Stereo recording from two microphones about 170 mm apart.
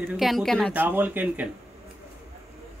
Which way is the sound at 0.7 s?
10° right (ahead or behind).